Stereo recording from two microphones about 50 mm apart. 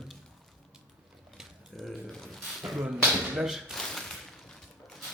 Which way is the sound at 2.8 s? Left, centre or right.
Right.